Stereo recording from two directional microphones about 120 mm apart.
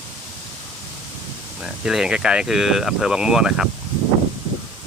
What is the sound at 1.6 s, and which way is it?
Speech, 5° right (ahead or behind).